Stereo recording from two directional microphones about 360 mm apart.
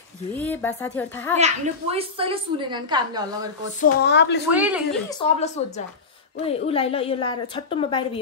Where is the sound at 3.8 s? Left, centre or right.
Left.